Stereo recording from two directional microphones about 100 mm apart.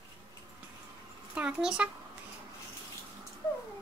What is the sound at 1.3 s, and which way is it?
Speech, 10° right (ahead or behind).